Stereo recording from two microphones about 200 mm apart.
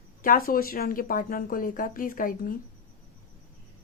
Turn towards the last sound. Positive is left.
turn(degrees=45)  # may be behind; listen again after turning